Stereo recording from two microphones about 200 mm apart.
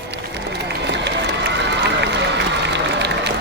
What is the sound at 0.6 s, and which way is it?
Run, 60° right (ahead or behind).